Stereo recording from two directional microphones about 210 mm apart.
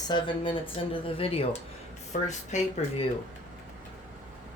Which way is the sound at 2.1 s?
40° left (ahead or behind).